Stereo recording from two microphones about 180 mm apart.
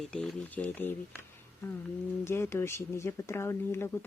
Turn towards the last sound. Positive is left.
turn(degrees=15)  # may be behind; listen again after turning